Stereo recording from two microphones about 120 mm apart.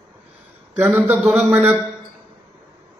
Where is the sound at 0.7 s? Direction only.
10° right (ahead or behind).